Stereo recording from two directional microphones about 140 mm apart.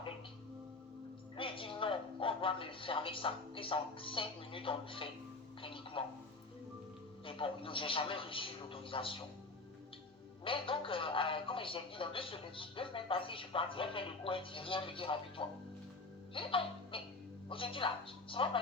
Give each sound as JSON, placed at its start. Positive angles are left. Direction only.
{"t": 1.4, "sound": "a woman's voice", "side_deg": 40}
{"t": 5.6, "sound": "telephone", "side_deg": 40}
{"t": 7.3, "sound": "speech", "side_deg": 40}
{"t": 10.4, "sound": "speech", "side_deg": 40}